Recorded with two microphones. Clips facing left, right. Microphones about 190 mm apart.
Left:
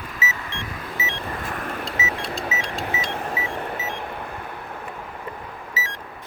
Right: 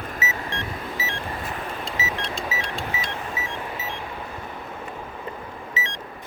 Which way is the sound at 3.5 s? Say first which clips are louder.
Left 3 dB; 55° left (ahead or behind).